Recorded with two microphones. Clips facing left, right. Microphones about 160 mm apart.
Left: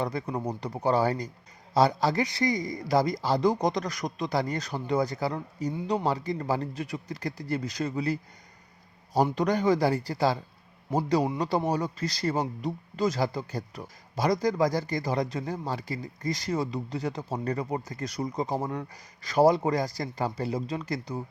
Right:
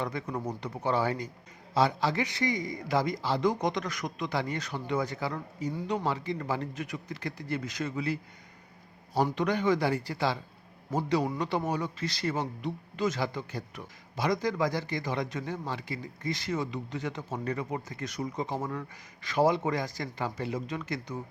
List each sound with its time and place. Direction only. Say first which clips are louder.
0.0 s speech: left 3 dB; 35° left (ahead or behind)
9.3 s speech: left 3 dB; 40° left (ahead or behind)